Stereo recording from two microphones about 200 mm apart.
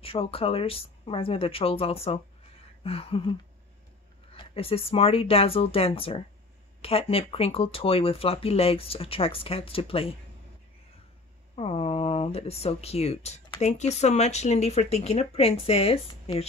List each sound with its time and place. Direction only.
0.0 s speech: 30° left (ahead or behind)
11.5 s speech: 30° left (ahead or behind)